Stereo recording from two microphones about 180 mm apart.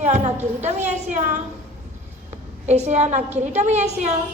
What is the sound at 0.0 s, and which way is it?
A woman's voice, 40° right (ahead or behind).